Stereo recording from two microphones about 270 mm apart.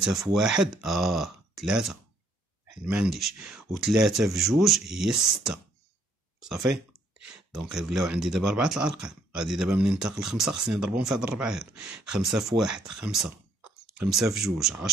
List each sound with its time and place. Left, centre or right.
0.0 s speech: centre
7.2 s a sound: right
7.5 s speech: centre